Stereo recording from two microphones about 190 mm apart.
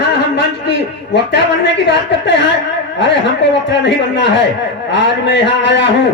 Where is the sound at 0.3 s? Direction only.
65° left (ahead or behind).